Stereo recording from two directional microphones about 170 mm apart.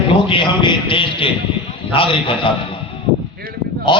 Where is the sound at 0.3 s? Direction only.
30° left (ahead or behind).